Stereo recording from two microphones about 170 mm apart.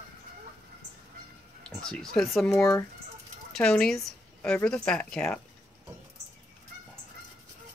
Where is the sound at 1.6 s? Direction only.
5° left (ahead or behind).